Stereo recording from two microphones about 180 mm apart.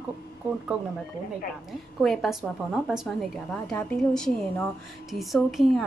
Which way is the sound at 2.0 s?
Centre (ahead or behind).